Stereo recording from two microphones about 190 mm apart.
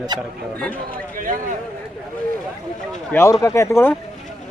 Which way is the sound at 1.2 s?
45° right (ahead or behind).